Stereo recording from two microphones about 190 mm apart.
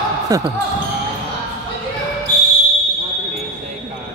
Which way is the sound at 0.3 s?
20° right (ahead or behind).